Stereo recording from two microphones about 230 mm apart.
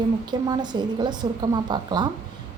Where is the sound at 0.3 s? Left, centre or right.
Centre.